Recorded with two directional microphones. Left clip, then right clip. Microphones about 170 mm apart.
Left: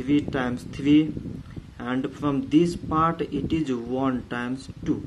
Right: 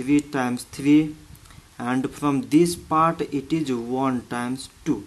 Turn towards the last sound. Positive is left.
turn(degrees=-20)  # may be behind; listen again after turning